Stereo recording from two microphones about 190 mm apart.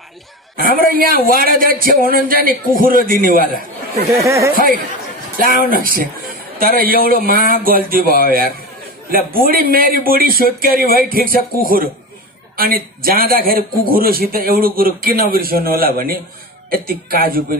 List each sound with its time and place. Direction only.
0.7 s a man's voice: 50° right (ahead or behind)
4.2 s speech: 15° right (ahead or behind)
4.6 s a man's voice: 45° right (ahead or behind)
9.1 s a man's voice: 50° right (ahead or behind)